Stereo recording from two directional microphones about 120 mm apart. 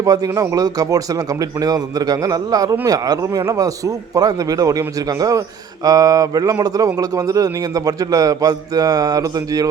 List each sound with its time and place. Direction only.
0.0 s speech: 30° right (ahead or behind)